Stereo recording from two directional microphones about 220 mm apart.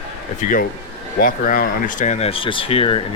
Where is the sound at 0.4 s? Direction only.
40° left (ahead or behind).